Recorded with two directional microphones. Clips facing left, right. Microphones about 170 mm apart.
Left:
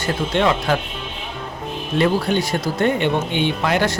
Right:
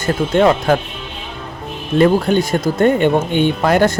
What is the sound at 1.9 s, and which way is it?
Speech, 45° right (ahead or behind).